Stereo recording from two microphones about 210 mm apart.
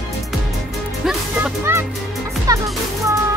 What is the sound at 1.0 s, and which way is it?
Music, 10° right (ahead or behind).